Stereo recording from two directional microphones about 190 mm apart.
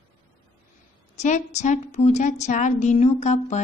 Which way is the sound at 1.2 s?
35° left (ahead or behind).